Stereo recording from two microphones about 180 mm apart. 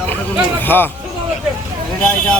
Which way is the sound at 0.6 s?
10° left (ahead or behind).